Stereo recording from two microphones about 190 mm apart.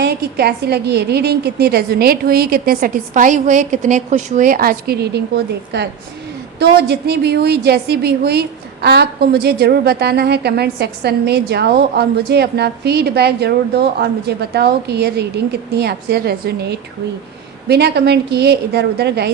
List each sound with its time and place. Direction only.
0.0 s a woman's voice: 60° right (ahead or behind)
6.6 s a woman's voice: 60° right (ahead or behind)